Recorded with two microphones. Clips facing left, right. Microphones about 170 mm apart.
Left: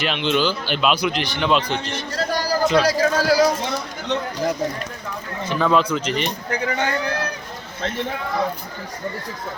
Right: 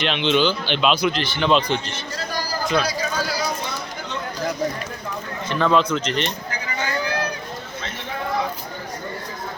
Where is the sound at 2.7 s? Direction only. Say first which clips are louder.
Left 3 dB; 90° left.